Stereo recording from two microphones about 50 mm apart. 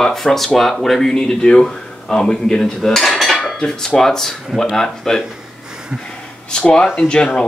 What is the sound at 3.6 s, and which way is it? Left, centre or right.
Speech, centre.